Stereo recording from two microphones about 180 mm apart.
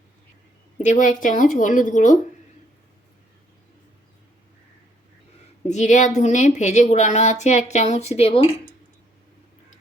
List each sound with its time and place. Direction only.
0.8 s a woman's voice: 45° left (ahead or behind)
5.6 s a woman's voice: 40° left (ahead or behind)